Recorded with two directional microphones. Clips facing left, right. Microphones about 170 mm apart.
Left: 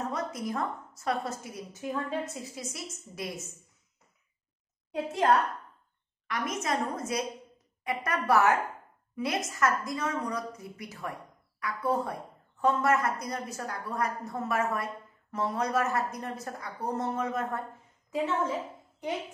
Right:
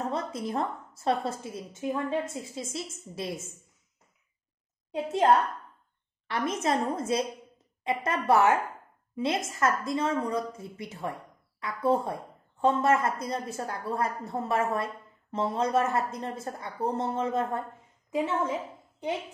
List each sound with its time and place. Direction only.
0.1 s speech: 30° right (ahead or behind)
4.9 s speech: 25° right (ahead or behind)